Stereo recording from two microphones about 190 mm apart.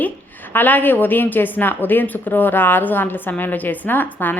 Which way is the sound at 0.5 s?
10° left (ahead or behind).